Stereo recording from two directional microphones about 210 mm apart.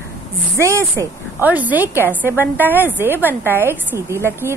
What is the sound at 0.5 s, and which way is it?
Speech, 15° right (ahead or behind).